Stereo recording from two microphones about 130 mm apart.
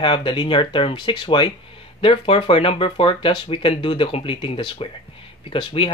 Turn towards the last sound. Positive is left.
turn(degrees=40)  # may be behind; listen again after turning